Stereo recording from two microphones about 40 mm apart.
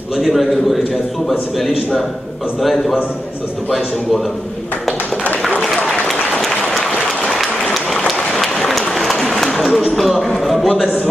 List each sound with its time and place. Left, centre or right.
0.2 s speech: centre
5.9 s applause: centre
8.0 s applause: centre
9.9 s speech: centre